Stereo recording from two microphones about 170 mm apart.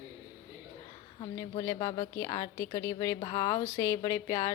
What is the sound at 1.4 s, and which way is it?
A woman's voice, 20° left (ahead or behind).